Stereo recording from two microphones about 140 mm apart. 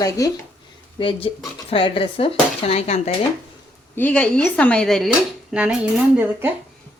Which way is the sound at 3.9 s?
10° left (ahead or behind).